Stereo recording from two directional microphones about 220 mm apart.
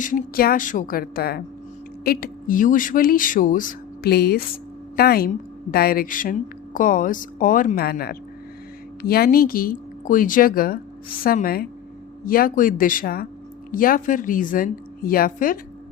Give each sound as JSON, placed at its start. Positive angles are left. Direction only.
{"t": 0.0, "sound": "speech", "side_deg": 40}